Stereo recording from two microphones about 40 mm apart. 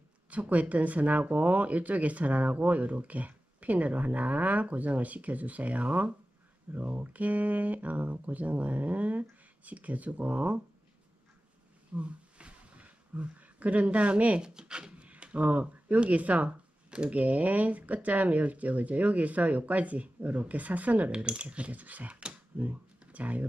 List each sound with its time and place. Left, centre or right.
0.3 s speech: right
11.9 s a sound: right
14.4 s speech: right
14.9 s a sound: right
16.0 s speech: right
21.1 s speech: right